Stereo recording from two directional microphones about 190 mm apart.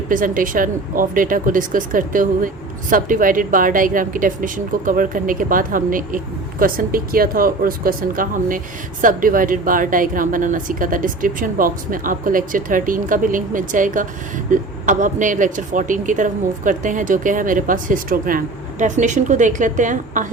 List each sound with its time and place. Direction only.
0.1 s speech: 45° right (ahead or behind)